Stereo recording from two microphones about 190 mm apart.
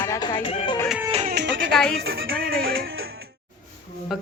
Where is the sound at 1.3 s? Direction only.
70° right (ahead or behind).